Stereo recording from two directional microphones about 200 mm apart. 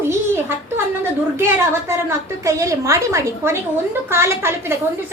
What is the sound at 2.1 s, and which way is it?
A woman's voice, 15° right (ahead or behind).